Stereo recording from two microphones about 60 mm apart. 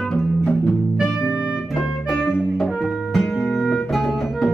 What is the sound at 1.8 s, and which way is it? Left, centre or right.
Music, centre.